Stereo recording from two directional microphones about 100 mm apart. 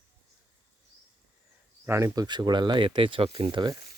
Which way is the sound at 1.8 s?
25° right (ahead or behind).